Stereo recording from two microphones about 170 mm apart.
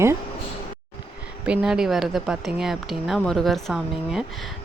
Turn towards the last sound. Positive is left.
turn(degrees=0)  # may be behind; listen again after turning